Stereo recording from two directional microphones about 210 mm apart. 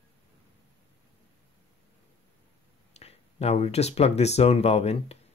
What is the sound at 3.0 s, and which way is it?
Speech, 30° left (ahead or behind).